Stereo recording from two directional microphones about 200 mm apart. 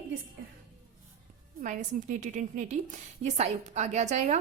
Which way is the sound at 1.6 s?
40° right (ahead or behind).